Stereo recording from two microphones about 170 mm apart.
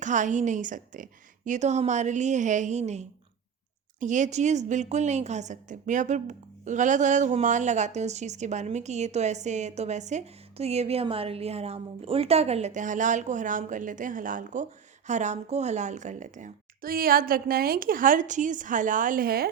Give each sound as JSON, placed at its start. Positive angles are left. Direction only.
{"t": 0.0, "sound": "a woman's voice", "side_deg": -45}